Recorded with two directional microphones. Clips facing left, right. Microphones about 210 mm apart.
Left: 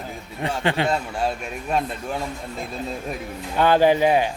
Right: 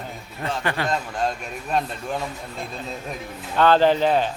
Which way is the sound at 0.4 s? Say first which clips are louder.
Left 3 dB; 15° left (ahead or behind).